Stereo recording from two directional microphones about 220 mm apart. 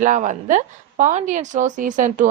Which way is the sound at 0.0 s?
35° right (ahead or behind).